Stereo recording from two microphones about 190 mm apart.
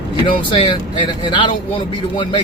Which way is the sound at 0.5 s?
25° left (ahead or behind).